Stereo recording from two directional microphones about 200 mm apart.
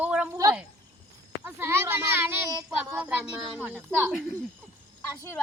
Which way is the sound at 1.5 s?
10° right (ahead or behind).